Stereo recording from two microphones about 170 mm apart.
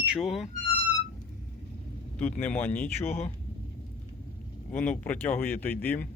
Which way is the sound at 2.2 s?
10° left (ahead or behind).